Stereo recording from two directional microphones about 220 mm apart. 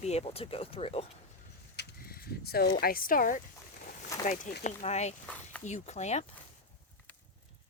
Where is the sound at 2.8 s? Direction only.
40° left (ahead or behind).